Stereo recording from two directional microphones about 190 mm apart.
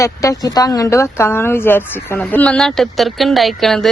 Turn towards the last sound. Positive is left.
turn(degrees=0)  # may be behind; listen again after turning